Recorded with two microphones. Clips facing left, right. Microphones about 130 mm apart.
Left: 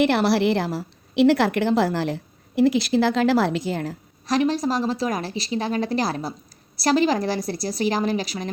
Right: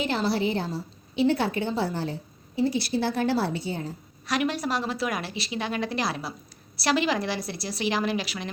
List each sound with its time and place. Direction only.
0.0 s a woman's voice: 75° left (ahead or behind); by 3.9 s 90° left
4.3 s a woman's voice: 35° left (ahead or behind)